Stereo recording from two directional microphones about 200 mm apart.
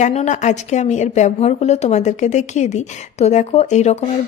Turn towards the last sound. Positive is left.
turn(degrees=35)  # may be behind; listen again after turning